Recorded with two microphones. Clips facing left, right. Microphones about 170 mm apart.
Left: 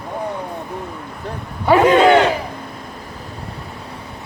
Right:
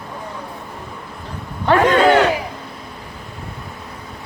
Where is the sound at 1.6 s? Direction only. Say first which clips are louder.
Left 2 dB; 10° left (ahead or behind).